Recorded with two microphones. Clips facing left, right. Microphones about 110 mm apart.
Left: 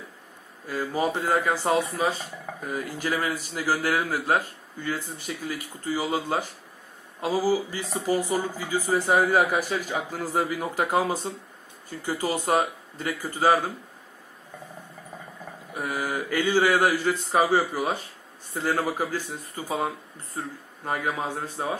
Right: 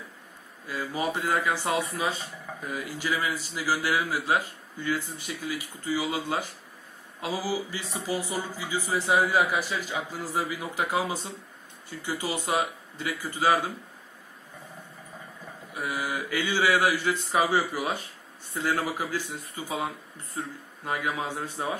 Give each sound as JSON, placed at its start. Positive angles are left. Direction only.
{"t": 0.7, "sound": "a man's voice", "side_deg": 40}
{"t": 15.7, "sound": "a man's voice", "side_deg": 45}